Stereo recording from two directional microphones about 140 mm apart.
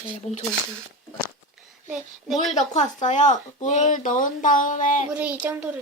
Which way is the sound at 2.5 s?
55° left (ahead or behind).